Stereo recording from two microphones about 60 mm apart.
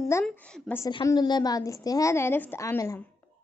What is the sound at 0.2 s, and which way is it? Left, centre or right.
Speech, left.